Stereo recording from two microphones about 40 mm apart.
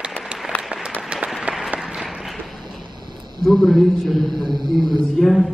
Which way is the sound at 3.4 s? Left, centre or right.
Centre.